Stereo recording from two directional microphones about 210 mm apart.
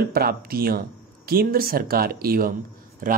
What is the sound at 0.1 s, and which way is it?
Speech, 45° right (ahead or behind).